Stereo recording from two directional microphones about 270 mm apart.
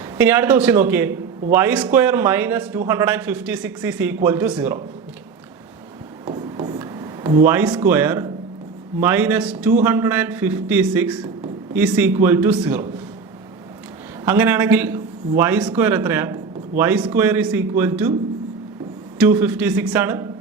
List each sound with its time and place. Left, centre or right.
0.2 s a man's voice: centre
6.2 s a sound: centre
7.4 s a man's voice: centre
14.3 s a man's voice: centre
19.2 s a man's voice: centre